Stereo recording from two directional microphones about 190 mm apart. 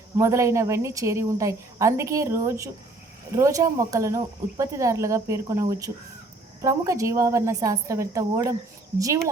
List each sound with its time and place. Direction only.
0.2 s speech: 15° right (ahead or behind)